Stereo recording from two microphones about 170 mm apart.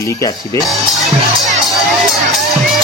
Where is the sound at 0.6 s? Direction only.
Centre (ahead or behind).